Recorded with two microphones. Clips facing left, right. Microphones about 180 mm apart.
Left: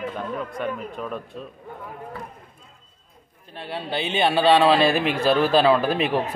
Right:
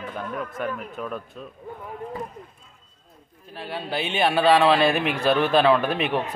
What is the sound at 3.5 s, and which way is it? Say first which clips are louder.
A man's voice: left 1 dB; centre (ahead or behind).